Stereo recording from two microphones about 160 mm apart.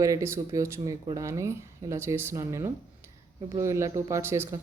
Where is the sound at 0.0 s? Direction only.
20° right (ahead or behind).